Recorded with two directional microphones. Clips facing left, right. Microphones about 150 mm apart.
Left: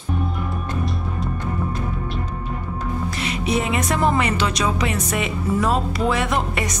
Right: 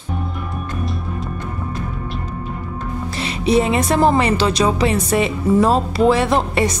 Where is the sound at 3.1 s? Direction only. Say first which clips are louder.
Right 8 dB; 30° right (ahead or behind).